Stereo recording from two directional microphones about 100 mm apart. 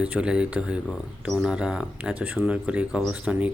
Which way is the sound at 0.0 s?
10° right (ahead or behind).